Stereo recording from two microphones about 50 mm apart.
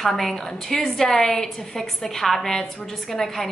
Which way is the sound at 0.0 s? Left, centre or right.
Centre.